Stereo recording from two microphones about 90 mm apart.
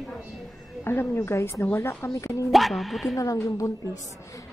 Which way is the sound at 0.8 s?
30° left (ahead or behind).